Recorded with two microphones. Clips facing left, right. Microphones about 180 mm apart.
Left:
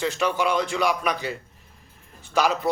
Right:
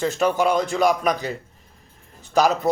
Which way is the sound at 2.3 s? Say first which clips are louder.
Right 4 dB; 40° right (ahead or behind).